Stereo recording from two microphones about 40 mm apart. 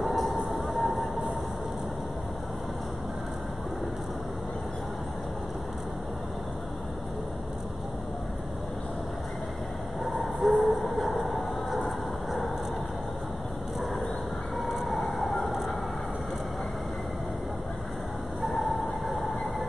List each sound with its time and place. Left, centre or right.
0.0 s vehicle: centre
10.0 s vehicle: centre
14.6 s emergency vehicle: centre
18.4 s a sound: centre